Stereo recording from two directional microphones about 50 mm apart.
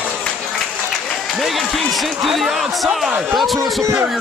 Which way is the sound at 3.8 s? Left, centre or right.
Right.